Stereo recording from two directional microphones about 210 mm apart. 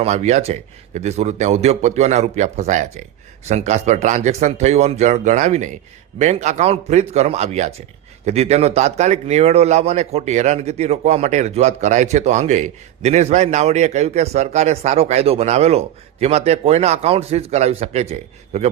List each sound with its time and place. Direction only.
0.0 s a man's voice: 30° right (ahead or behind)